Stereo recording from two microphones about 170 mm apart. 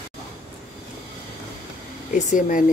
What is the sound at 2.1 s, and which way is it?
Speech, 50° left (ahead or behind).